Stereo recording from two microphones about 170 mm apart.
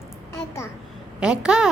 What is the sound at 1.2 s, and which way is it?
Speech, 5° right (ahead or behind).